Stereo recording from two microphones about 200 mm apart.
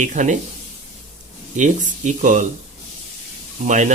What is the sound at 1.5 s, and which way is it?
Speech, 35° right (ahead or behind).